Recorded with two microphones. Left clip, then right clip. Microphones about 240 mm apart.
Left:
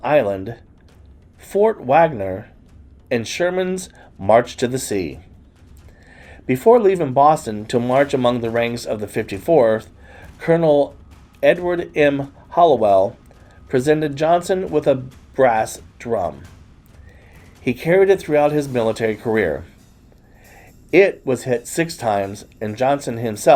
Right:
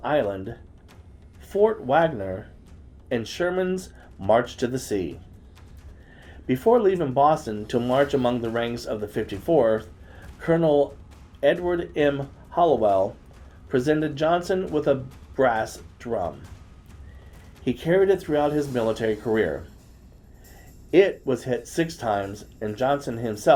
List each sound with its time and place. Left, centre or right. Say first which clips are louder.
0.0 s speech: left 7 dB; left
1.5 s speech: left 6 dB; left
4.6 s speech: left 5 dB; left
6.6 s speech: left 6 dB; left
9.0 s speech: left 5 dB; left
13.7 s speech: left 6 dB; left
17.8 s speech: left 6 dB; left
21.6 s speech: left 5 dB; left